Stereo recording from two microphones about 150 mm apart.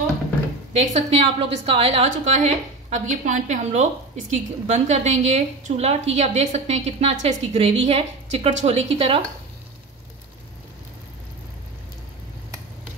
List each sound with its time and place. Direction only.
0.7 s a woman's voice: 45° right (ahead or behind)
2.0 s a woman's voice: 50° right (ahead or behind)